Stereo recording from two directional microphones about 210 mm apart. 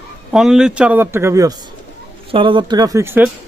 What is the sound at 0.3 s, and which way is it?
Speech, centre (ahead or behind).